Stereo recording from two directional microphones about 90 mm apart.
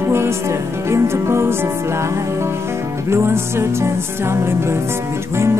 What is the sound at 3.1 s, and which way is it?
Music, 30° right (ahead or behind).